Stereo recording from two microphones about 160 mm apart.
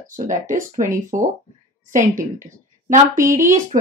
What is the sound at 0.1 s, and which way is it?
Speech, 55° right (ahead or behind).